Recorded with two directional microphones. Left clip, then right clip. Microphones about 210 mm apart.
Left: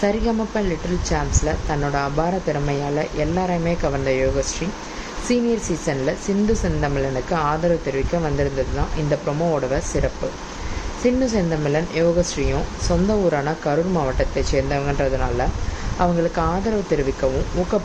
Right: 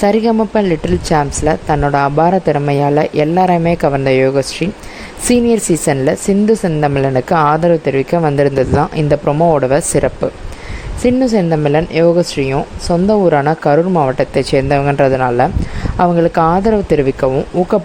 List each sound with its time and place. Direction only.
0.0 s speech: 45° right (ahead or behind)